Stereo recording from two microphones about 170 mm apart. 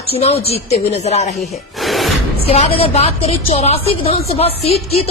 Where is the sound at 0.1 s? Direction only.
35° left (ahead or behind).